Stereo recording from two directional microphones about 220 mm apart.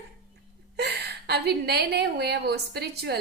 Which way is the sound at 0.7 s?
50° right (ahead or behind).